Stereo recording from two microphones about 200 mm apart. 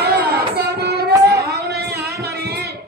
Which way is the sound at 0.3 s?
55° right (ahead or behind).